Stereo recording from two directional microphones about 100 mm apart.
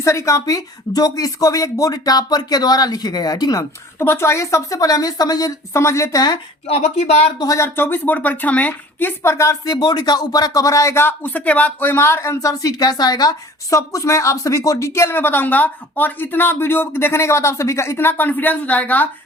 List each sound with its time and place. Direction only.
0.0 s speech: 30° left (ahead or behind)
3.9 s speech: 25° left (ahead or behind); by 6.4 s 40° left (ahead or behind)
6.7 s speech: 90° left
7.3 s a woman's voice: 35° left (ahead or behind); by 19.0 s 15° left (ahead or behind)